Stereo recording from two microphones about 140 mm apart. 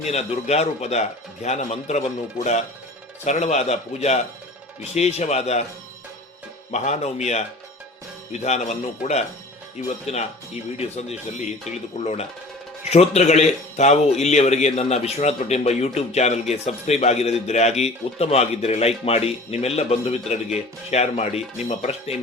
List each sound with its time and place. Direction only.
0.0 s speech: 50° left (ahead or behind)
6.7 s speech: 55° left (ahead or behind)